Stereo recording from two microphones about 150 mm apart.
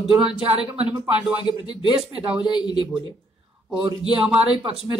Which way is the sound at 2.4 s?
30° left (ahead or behind).